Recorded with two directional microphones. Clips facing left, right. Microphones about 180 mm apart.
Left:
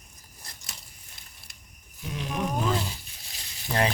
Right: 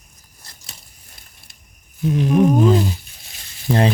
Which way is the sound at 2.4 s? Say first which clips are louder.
Right 12 dB; 25° right (ahead or behind).